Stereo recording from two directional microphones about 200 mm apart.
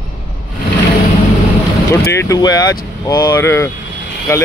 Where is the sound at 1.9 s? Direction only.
15° left (ahead or behind).